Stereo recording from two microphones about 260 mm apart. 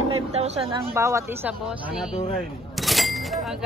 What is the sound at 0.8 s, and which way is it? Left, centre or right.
Speech, centre.